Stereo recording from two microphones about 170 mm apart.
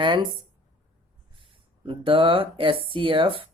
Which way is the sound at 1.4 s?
30° right (ahead or behind).